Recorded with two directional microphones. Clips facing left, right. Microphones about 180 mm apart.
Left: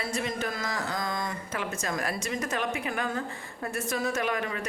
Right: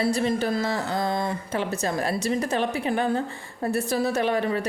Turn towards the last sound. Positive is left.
turn(degrees=-35)  # may be behind; listen again after turning